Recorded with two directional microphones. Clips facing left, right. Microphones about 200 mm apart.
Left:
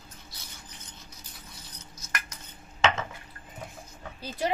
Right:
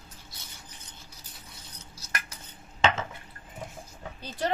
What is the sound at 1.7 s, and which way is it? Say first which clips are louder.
Cutlery: even; 30° right (ahead or behind).